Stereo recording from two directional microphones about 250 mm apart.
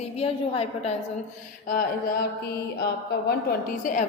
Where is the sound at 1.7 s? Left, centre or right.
Left.